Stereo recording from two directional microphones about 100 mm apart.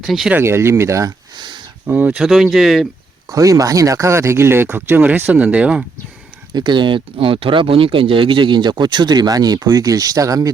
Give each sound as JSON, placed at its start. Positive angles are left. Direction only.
{"t": 0.0, "sound": "speech", "side_deg": 0}
{"t": 0.3, "sound": "speech", "side_deg": -25}
{"t": 1.4, "sound": "a sound", "side_deg": -50}
{"t": 1.9, "sound": "speech", "side_deg": -15}
{"t": 2.2, "sound": "speech", "side_deg": -5}
{"t": 3.2, "sound": "speech", "side_deg": -35}
{"t": 6.5, "sound": "speech", "side_deg": -50}